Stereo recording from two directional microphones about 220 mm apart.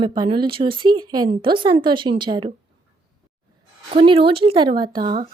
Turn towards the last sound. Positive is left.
turn(degrees=-20)  # may be behind; listen again after turning